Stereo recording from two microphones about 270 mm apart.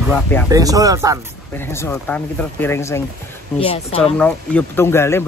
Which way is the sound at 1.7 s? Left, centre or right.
Centre.